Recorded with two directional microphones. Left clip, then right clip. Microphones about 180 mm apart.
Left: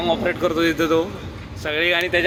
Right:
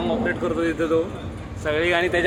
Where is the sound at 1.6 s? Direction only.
25° left (ahead or behind).